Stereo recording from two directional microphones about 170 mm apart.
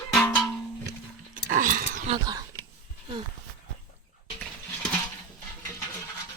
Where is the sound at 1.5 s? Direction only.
50° right (ahead or behind).